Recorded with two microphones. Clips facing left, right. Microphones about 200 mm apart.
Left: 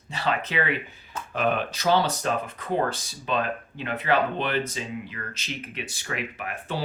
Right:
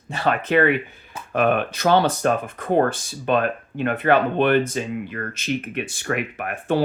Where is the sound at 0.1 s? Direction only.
50° right (ahead or behind).